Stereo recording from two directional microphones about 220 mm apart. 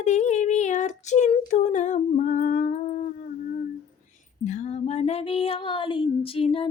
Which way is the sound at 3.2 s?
35° left (ahead or behind).